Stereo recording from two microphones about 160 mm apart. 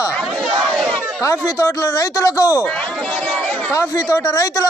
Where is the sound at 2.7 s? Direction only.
10° left (ahead or behind).